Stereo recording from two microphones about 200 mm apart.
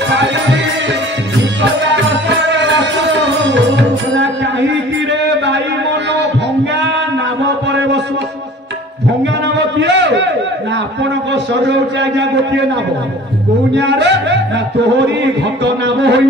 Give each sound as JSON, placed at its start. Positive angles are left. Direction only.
{"t": 0.1, "sound": "music", "side_deg": -60}
{"t": 2.2, "sound": "music", "side_deg": -60}
{"t": 9.8, "sound": "a sound", "side_deg": -60}
{"t": 11.6, "sound": "a man's voice", "side_deg": -65}
{"t": 13.7, "sound": "a man's voice", "side_deg": -60}
{"t": 15.6, "sound": "a man's voice", "side_deg": -60}